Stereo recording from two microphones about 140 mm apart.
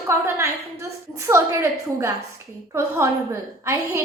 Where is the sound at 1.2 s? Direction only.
20° right (ahead or behind).